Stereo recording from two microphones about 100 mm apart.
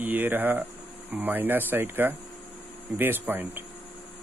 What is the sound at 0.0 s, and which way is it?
Speech, 20° right (ahead or behind).